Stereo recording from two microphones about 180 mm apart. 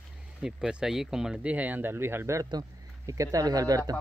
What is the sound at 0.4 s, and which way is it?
Speech, 5° right (ahead or behind).